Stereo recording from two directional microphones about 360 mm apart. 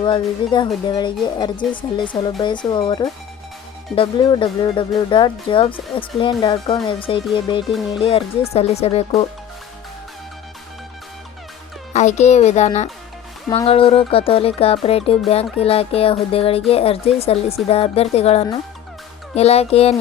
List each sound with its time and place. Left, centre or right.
0.0 s speech: centre
7.7 s speech: centre
8.0 s speech: centre
11.9 s a child's voice: centre